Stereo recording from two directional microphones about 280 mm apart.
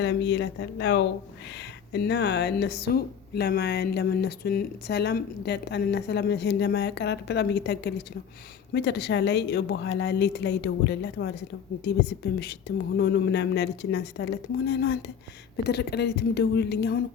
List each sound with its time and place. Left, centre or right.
0.0 s a woman's voice: left
12.4 s a woman's voice: left